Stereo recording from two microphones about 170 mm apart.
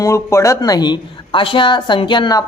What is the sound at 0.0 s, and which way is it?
Speech, 15° left (ahead or behind).